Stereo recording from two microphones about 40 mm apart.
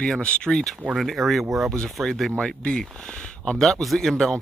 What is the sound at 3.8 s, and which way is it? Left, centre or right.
Speech, centre.